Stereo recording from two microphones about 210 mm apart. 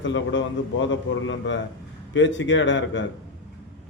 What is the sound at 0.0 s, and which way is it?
A man's voice, 60° left (ahead or behind).